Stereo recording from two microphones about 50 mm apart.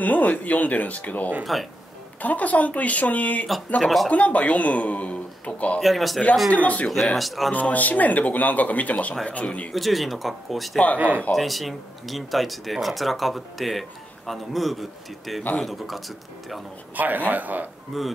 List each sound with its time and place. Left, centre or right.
0.0 s speech: left
1.4 s speech: centre
2.2 s speech: left
5.8 s speech: centre
6.5 s speech: left
7.2 s speech: centre
7.7 s speech: left
9.7 s speech: centre
11.0 s a man's voice: right
11.3 s speech: centre
16.9 s a man's voice: right
17.9 s speech: centre